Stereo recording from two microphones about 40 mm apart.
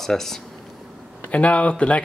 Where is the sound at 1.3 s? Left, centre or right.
Left.